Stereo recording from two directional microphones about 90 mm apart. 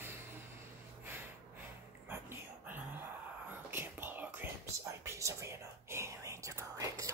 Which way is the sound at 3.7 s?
25° right (ahead or behind).